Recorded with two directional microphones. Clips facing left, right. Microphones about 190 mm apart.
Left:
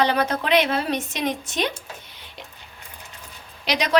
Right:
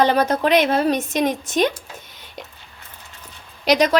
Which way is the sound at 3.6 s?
45° right (ahead or behind).